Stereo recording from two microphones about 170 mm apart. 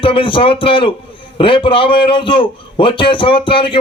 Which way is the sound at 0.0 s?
30° left (ahead or behind).